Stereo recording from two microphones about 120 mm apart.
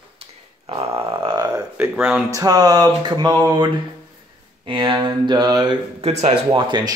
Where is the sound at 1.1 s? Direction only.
45° right (ahead or behind).